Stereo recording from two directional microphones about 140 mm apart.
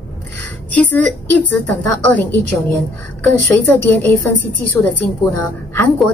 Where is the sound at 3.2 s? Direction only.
15° left (ahead or behind).